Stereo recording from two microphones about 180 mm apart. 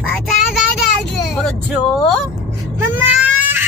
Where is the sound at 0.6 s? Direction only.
Centre (ahead or behind).